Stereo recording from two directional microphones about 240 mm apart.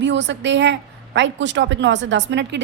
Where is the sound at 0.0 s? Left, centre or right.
Right.